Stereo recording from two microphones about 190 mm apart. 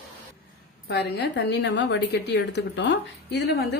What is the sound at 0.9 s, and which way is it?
A woman's voice, 60° left (ahead or behind).